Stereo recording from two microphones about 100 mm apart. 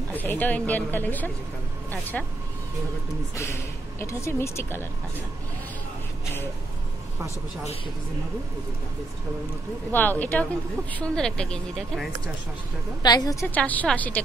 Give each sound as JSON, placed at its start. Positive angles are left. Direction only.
{"t": 0.1, "sound": "a woman's voice", "side_deg": 15}
{"t": 4.0, "sound": "speech", "side_deg": 30}
{"t": 9.8, "sound": "a woman's voice", "side_deg": 20}
{"t": 13.0, "sound": "a woman's voice", "side_deg": 40}
{"t": 13.6, "sound": "a woman's voice", "side_deg": 15}